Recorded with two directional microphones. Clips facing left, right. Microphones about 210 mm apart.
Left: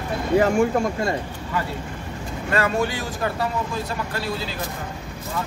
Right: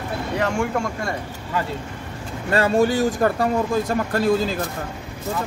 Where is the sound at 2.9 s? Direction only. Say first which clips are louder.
Right 8 dB; 45° right (ahead or behind).